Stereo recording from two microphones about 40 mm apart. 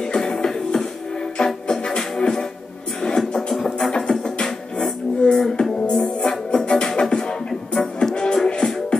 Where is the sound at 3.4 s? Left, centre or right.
Centre.